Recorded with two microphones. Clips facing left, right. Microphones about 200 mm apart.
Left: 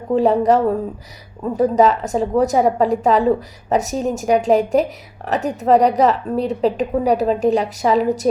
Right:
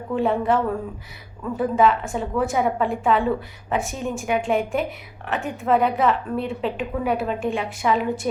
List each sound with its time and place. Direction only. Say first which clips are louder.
0.1 s a woman's voice: left 6 dB; 40° left (ahead or behind)